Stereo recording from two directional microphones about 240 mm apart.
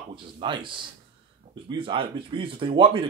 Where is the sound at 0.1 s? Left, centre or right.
Centre.